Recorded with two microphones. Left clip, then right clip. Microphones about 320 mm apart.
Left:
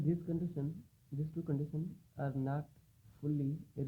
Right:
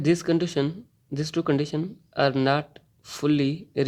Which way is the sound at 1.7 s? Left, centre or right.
Right.